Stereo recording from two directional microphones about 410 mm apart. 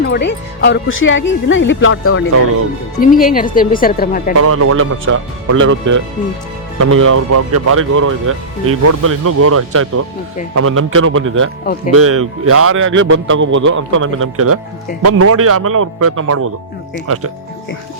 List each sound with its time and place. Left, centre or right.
0.0 s speech: left
4.4 s a man's voice: right